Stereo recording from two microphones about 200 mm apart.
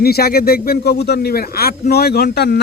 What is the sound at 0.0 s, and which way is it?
A man's voice, 50° left (ahead or behind).